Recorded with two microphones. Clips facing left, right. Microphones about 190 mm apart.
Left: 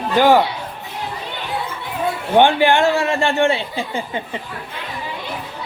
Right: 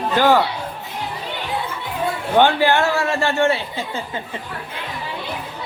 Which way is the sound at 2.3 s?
20° left (ahead or behind).